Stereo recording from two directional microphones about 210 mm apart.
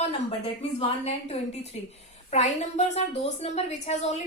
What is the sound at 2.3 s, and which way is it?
A woman's voice, 30° left (ahead or behind).